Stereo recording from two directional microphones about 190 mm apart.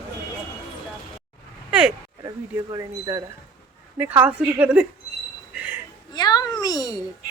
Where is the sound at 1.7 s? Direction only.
5° right (ahead or behind).